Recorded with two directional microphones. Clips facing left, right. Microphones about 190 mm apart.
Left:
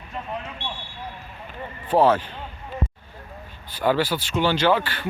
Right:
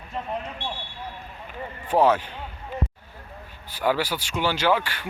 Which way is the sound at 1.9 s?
10° right (ahead or behind).